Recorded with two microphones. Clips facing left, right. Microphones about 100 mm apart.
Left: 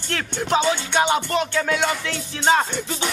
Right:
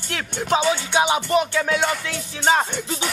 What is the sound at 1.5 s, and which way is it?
Music, 5° right (ahead or behind).